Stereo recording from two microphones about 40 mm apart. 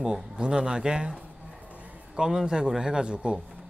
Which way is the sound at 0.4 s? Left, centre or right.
Centre.